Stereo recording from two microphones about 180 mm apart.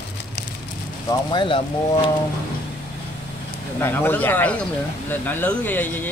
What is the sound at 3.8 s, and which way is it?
Speech, 10° left (ahead or behind).